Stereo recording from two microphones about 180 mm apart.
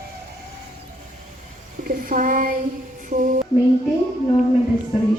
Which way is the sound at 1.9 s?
50° right (ahead or behind).